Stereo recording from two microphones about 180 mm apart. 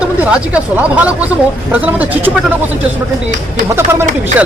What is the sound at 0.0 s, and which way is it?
Speech, 5° right (ahead or behind).